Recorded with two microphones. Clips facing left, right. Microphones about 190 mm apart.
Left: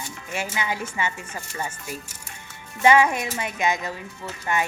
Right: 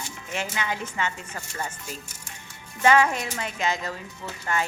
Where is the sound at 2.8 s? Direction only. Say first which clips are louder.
Left 2 dB; 15° left (ahead or behind).